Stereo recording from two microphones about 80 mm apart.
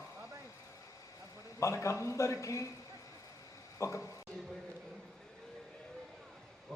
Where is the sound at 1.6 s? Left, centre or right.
Left.